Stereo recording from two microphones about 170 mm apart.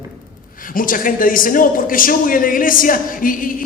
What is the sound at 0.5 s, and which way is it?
A man's voice, 55° left (ahead or behind).